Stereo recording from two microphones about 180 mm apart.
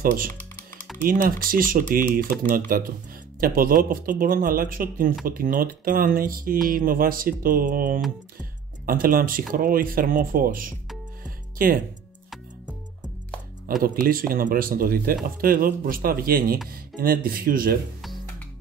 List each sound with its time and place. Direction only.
0.0 s speech: 50° right (ahead or behind)
11.2 s music: 50° right (ahead or behind)
13.8 s speech: 50° right (ahead or behind)